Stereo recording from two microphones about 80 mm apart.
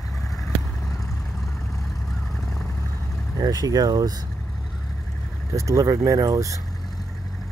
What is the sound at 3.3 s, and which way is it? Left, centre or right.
Speech, right.